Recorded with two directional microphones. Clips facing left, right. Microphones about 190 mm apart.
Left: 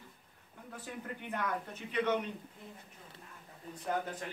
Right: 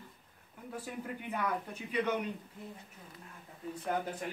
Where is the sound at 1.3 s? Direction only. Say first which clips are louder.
Right 1 dB; 10° right (ahead or behind).